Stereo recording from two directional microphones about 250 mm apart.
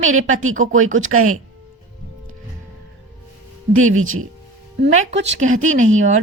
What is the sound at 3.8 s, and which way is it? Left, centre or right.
A woman's voice, right.